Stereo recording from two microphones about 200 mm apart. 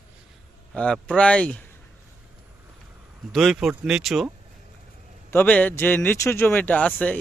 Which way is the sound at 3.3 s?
Centre (ahead or behind).